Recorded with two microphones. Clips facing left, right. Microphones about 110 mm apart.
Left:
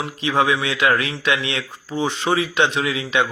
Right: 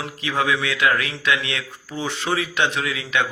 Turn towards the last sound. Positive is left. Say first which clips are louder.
# left 3 dB
turn(degrees=20)  # may be behind; listen again after turning